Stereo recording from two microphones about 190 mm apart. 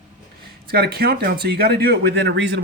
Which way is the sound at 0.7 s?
55° right (ahead or behind).